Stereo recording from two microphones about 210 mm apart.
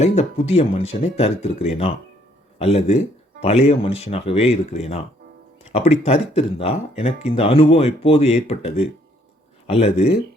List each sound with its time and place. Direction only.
0.0 s speech: 30° left (ahead or behind)